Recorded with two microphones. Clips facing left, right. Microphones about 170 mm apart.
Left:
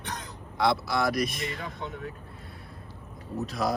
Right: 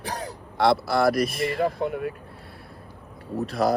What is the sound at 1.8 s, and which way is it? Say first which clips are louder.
Speech: right 10 dB; 60° right (ahead or behind).